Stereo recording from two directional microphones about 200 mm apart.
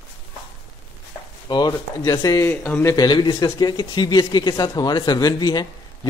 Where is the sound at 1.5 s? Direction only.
20° left (ahead or behind).